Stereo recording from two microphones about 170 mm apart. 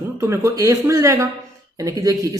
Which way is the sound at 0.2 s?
15° right (ahead or behind).